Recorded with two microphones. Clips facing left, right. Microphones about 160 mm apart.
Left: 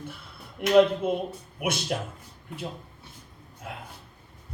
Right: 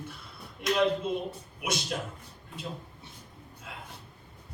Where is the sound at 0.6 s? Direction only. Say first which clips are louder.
Left 7 dB; 60° left (ahead or behind).